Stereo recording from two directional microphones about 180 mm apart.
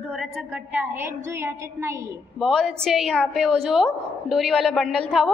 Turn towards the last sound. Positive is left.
turn(degrees=0)  # may be behind; listen again after turning